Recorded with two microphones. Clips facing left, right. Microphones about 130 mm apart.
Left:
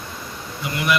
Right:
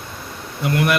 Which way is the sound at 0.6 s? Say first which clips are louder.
Right 4 dB; 55° right (ahead or behind).